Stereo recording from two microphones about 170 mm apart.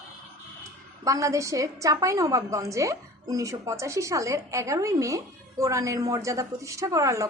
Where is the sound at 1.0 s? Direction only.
20° right (ahead or behind).